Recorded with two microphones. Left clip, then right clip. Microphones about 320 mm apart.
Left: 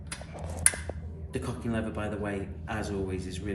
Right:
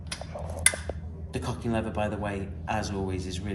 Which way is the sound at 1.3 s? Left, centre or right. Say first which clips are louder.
Right 3 dB; right.